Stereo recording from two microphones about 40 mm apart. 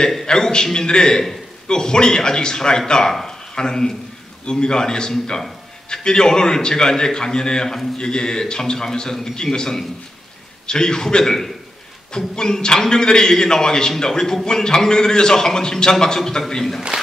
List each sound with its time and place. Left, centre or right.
0.1 s a man's voice: centre